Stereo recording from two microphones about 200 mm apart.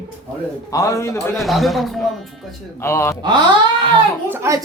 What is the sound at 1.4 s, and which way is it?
Speech, centre (ahead or behind).